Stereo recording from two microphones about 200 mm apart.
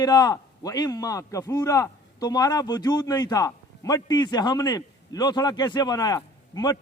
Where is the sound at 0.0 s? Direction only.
20° left (ahead or behind).